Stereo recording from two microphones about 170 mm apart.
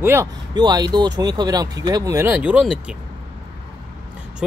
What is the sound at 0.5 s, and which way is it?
Speech, 25° right (ahead or behind).